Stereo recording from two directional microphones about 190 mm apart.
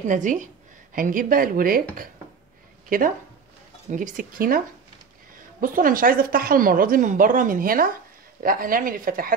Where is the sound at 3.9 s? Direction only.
40° right (ahead or behind).